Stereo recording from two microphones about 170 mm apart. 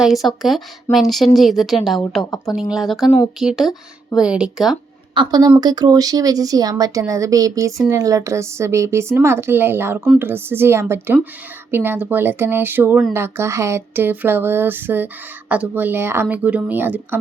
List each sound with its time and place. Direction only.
0.0 s speech: centre (ahead or behind)
5.1 s speech: 25° right (ahead or behind)
7.9 s a sound: 20° right (ahead or behind)